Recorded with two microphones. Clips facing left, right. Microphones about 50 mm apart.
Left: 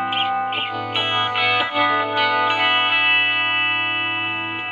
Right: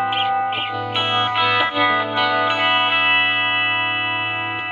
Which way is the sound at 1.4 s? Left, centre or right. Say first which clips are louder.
Right 1 dB; centre.